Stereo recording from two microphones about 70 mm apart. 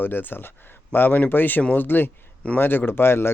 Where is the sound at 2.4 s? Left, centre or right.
Centre.